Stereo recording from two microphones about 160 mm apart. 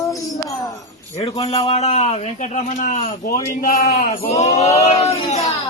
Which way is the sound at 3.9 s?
55° left (ahead or behind).